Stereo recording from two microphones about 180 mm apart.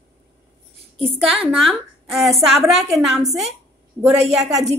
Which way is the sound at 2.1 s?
Centre (ahead or behind).